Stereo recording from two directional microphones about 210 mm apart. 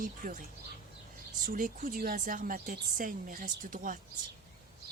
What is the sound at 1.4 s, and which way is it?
A woman's voice, 40° right (ahead or behind).